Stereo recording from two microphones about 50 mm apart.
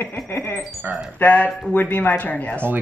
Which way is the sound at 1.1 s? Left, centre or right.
Left.